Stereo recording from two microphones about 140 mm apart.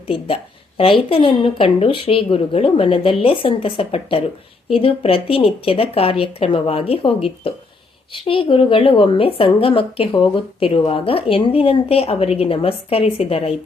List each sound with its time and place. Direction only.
0.0 s a woman's voice: 40° left (ahead or behind)